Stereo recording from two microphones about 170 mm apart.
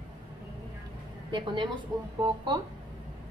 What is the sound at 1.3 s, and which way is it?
A woman's voice, 30° right (ahead or behind).